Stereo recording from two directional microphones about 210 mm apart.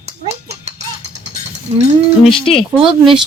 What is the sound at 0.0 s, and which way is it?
Dog, 30° right (ahead or behind).